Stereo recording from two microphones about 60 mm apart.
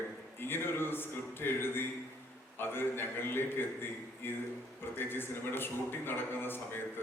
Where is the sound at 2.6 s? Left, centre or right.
Left.